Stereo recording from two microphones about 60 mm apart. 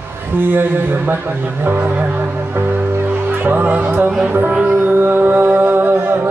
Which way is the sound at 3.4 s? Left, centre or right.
Right.